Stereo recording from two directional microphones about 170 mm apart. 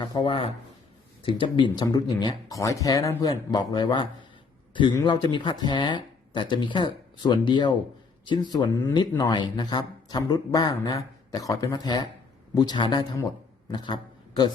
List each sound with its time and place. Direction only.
0.0 s a man's voice: 25° left (ahead or behind)